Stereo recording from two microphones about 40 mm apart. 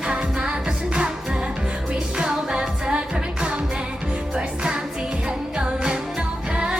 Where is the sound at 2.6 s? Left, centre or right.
Right.